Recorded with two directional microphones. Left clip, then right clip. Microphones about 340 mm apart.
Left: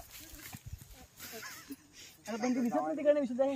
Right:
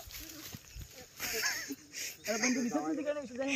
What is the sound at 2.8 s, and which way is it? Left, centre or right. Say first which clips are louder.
Speech: left 6 dB; left.